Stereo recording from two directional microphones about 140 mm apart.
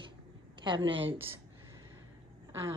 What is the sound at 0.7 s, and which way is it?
Speech, 35° right (ahead or behind).